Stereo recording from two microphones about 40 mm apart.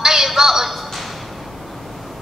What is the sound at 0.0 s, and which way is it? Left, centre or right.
Music, centre.